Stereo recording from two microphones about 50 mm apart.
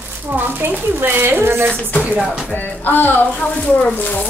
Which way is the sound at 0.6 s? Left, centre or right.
Right.